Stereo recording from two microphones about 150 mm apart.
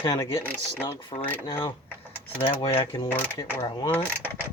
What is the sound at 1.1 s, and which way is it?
Speech, 40° left (ahead or behind).